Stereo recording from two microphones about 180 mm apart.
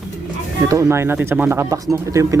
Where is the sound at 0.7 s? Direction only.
15° right (ahead or behind).